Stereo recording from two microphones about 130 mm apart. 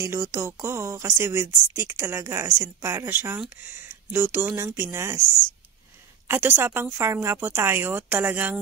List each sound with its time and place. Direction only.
0.0 s a woman's voice: 20° right (ahead or behind)